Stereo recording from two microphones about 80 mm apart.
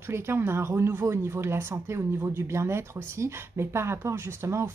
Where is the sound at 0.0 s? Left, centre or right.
Right.